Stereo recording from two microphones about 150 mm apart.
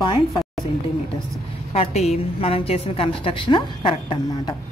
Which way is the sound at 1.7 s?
45° left (ahead or behind).